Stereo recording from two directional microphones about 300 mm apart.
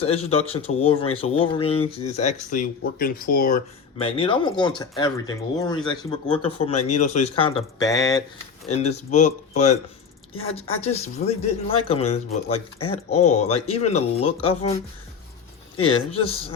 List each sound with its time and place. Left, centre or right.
0.0 s speech: centre
9.0 s speech: left
15.8 s speech: centre